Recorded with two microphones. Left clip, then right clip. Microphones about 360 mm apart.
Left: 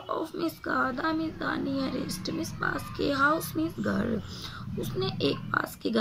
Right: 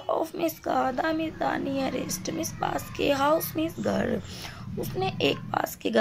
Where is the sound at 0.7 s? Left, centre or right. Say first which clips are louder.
Right 2 dB; centre.